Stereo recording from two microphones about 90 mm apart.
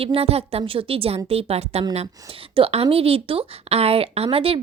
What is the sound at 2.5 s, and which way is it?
A woman's voice, 90° right.